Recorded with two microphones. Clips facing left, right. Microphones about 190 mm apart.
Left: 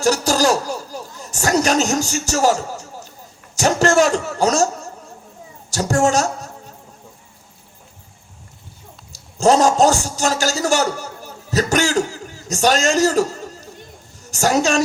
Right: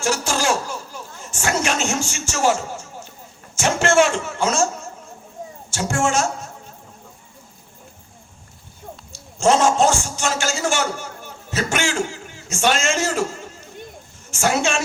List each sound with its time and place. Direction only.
0.0 s a man's voice: 40° left (ahead or behind)
9.1 s a man's voice: 40° left (ahead or behind)